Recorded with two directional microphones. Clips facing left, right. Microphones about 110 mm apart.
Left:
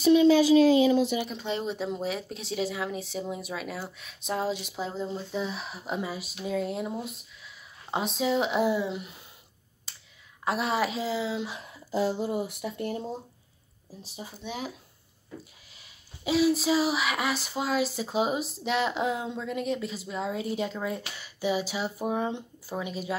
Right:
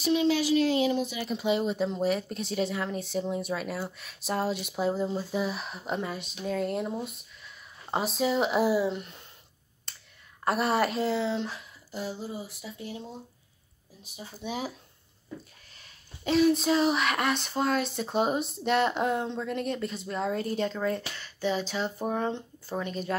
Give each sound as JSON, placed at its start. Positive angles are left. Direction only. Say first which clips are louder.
{"t": 1.3, "sound": "speech", "louder": "right 4 dB", "side_deg": -5}
{"t": 9.9, "sound": "whispering", "louder": "right 1 dB", "side_deg": 5}
{"t": 10.4, "sound": "speech", "louder": "right 2 dB", "side_deg": 0}
{"t": 12.0, "sound": "speech", "louder": "left 8 dB", "side_deg": 80}
{"t": 14.4, "sound": "speech", "louder": "right 2 dB", "side_deg": -5}
{"t": 15.8, "sound": "speech", "louder": "even", "side_deg": 5}